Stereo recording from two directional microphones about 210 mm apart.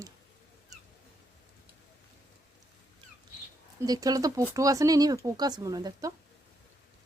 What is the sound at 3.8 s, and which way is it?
Speech, 20° right (ahead or behind).